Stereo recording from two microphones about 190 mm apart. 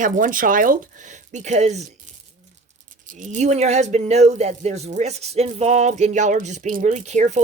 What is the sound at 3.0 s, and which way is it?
Speech, 40° right (ahead or behind).